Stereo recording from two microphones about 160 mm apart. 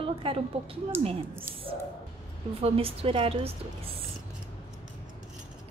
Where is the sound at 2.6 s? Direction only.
40° right (ahead or behind).